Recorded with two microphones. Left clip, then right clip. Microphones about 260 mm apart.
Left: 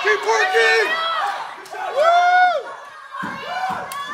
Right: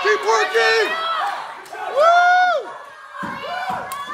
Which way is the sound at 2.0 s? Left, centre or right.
Centre.